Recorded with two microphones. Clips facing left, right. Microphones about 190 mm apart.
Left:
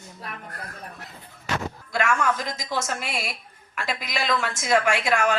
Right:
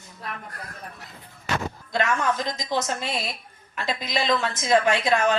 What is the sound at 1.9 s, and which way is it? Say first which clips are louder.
A woman's voice: even; 20° right (ahead or behind).